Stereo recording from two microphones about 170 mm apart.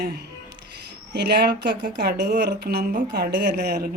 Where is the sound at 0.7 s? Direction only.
80° right.